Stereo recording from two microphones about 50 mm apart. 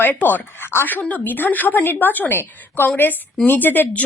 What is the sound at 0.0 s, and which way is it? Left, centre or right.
A woman's voice, left.